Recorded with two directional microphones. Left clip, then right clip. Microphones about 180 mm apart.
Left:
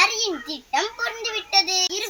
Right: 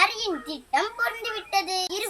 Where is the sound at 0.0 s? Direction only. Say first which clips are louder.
Left 3 dB; 10° right (ahead or behind).